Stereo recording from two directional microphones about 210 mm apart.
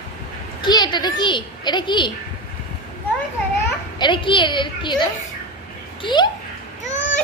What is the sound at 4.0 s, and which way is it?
A woman's voice, 25° left (ahead or behind).